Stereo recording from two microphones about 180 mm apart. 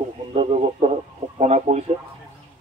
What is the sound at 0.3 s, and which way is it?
A man's voice, 35° right (ahead or behind).